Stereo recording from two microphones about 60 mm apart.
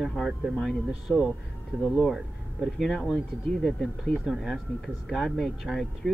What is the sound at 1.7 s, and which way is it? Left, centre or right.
Speech, right.